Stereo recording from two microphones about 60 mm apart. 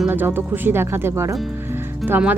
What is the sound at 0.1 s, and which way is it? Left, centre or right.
Speech, right.